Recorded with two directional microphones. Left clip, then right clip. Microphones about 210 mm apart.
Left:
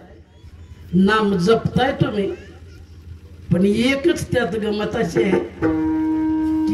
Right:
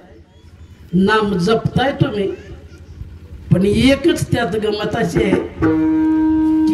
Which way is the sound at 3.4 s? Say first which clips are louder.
Right 4 dB; 15° right (ahead or behind).